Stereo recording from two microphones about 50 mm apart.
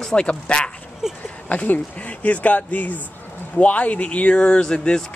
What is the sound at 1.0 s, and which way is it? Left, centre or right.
Speech, centre.